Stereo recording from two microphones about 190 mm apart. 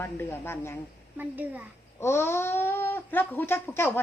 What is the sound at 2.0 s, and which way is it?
Speech, 15° left (ahead or behind).